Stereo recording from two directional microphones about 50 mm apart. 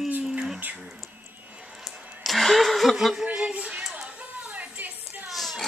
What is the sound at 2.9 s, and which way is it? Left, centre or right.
Speech, centre.